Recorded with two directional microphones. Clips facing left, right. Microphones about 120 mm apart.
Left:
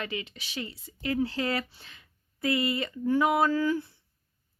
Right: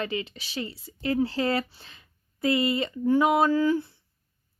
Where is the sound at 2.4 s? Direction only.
25° right (ahead or behind).